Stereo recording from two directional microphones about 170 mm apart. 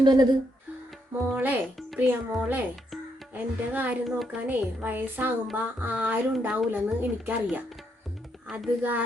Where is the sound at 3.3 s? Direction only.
10° right (ahead or behind).